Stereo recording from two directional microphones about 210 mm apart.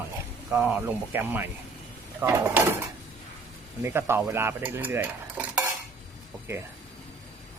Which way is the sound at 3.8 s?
10° right (ahead or behind).